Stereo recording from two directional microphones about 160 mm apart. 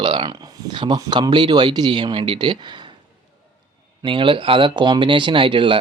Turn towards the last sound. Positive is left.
turn(degrees=-30)  # may be behind; listen again after turning